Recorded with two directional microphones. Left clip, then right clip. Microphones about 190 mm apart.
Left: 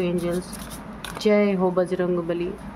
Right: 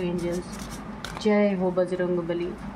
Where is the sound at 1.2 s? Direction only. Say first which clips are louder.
Left 3 dB; 40° left (ahead or behind).